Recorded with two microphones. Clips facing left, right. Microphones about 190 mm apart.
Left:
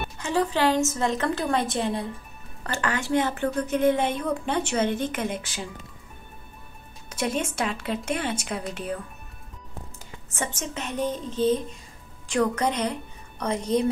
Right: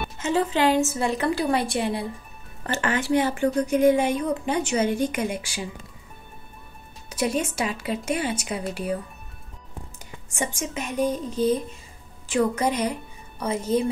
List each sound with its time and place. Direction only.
0.2 s a woman's voice: 15° right (ahead or behind)
7.1 s a woman's voice: 5° right (ahead or behind)
10.3 s a woman's voice: 10° right (ahead or behind)